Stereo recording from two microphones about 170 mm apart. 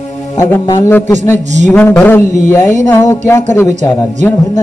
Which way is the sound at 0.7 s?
15° left (ahead or behind).